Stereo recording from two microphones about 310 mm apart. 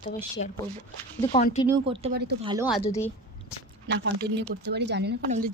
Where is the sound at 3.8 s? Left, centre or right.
Right.